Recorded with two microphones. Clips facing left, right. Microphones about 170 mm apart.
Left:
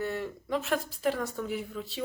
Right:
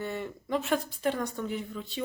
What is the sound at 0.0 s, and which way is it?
Speech, centre (ahead or behind).